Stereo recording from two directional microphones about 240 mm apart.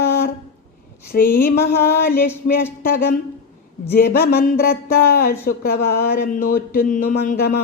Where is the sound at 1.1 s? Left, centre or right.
Left.